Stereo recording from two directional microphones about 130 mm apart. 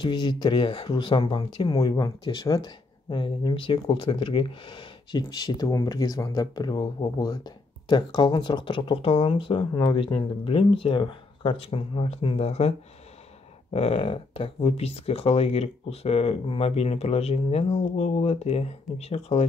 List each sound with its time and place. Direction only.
0.0 s speech: 35° left (ahead or behind); by 12.7 s 55° left (ahead or behind)
13.7 s speech: 50° left (ahead or behind)